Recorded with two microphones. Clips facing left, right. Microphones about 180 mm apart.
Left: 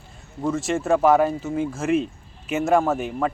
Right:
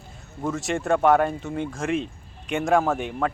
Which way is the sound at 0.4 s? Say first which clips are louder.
Left 3 dB; centre (ahead or behind).